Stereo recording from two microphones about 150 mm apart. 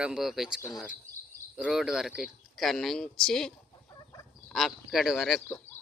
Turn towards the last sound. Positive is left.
turn(degrees=0)  # may be behind; listen again after turning